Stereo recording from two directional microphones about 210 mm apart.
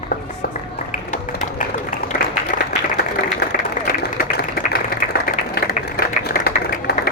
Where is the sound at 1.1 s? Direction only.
35° left (ahead or behind).